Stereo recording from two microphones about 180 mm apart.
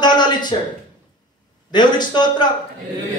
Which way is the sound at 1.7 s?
25° left (ahead or behind).